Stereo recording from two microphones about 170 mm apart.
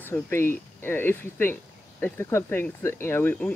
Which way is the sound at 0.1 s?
15° left (ahead or behind).